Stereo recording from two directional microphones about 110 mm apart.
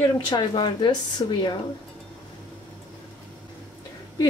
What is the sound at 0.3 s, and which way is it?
Speech, 40° left (ahead or behind).